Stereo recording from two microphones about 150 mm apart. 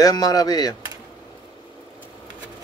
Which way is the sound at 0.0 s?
25° left (ahead or behind).